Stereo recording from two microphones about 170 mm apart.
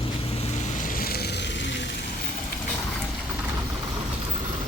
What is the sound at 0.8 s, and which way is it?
Vehicle, 60° left (ahead or behind).